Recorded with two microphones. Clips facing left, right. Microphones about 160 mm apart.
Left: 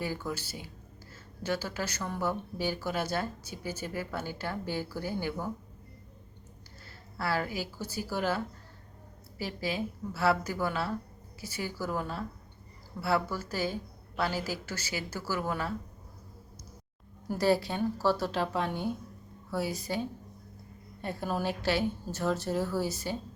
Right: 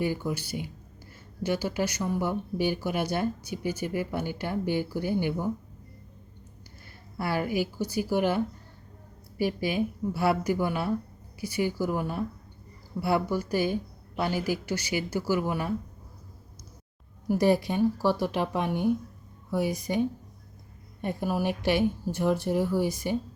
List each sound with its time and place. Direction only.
0.0 s speech: 20° right (ahead or behind)
7.2 s speech: 15° right (ahead or behind)
9.4 s speech: 15° right (ahead or behind)
17.2 s speech: 15° right (ahead or behind)